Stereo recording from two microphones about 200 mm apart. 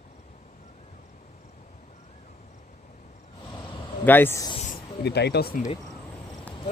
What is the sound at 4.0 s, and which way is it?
Speech, 10° left (ahead or behind).